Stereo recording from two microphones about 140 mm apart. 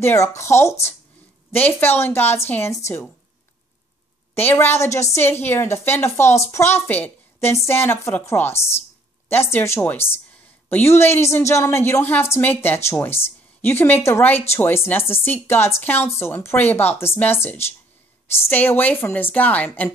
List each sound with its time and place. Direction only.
0.0 s speech: 20° left (ahead or behind)
4.4 s speech: 15° left (ahead or behind)